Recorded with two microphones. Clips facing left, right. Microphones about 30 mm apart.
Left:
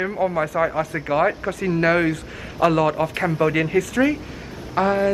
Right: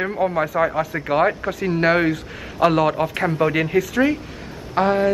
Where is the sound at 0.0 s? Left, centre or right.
Centre.